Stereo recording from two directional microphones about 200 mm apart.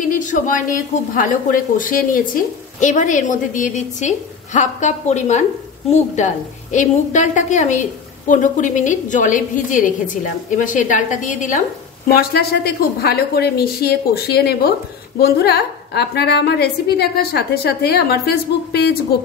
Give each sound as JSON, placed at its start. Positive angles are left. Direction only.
{"t": 0.1, "sound": "a woman's voice", "side_deg": 40}
{"t": 12.1, "sound": "a woman's voice", "side_deg": 50}